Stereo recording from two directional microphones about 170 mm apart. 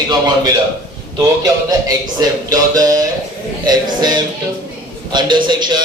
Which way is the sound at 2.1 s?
20° right (ahead or behind).